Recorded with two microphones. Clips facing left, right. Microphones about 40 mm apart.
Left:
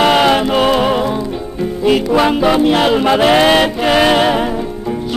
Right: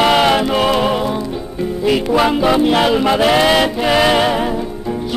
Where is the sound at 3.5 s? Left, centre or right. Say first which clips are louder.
Left 2 dB; left.